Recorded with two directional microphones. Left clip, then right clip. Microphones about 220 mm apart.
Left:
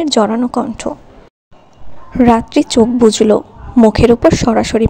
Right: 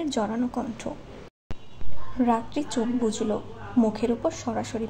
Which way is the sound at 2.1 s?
40° left (ahead or behind).